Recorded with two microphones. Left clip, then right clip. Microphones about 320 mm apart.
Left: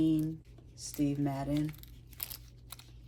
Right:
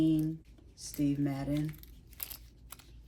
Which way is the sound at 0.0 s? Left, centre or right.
Centre.